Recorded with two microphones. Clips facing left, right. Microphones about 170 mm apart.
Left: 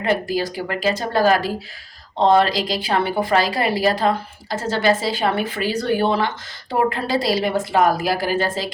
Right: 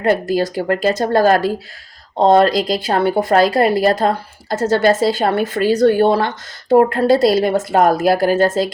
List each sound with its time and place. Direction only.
0.0 s a woman's voice: 45° right (ahead or behind)